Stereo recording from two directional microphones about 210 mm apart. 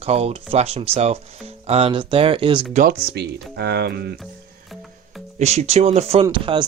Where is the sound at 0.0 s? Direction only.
30° right (ahead or behind).